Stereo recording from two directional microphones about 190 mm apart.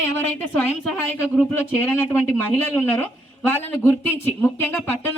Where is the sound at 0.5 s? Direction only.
10° left (ahead or behind).